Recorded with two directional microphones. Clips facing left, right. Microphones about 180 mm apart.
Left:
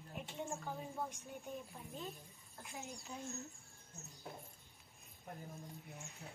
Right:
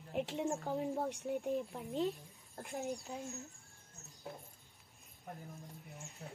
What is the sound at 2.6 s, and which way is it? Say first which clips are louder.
Speech: right 8 dB; 55° right (ahead or behind).